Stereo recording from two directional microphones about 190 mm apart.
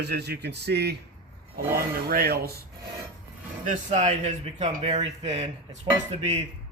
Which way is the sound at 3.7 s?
40° right (ahead or behind).